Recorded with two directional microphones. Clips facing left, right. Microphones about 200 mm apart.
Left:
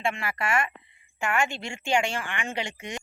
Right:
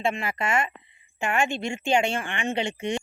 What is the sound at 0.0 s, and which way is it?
A woman's voice, 20° right (ahead or behind).